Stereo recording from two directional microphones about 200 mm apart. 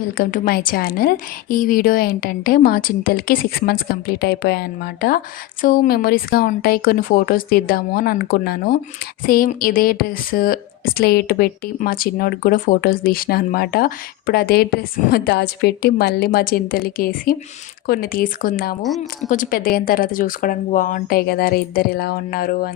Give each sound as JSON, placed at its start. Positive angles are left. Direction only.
{"t": 0.2, "sound": "a woman's voice", "side_deg": 45}
{"t": 18.8, "sound": "a woman's voice", "side_deg": 0}
{"t": 19.3, "sound": "a woman's voice", "side_deg": 45}